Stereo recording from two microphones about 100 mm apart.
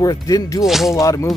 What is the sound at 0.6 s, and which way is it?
Speech, 5° right (ahead or behind).